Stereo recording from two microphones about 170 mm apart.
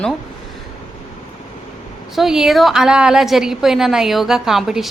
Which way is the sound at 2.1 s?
Centre (ahead or behind).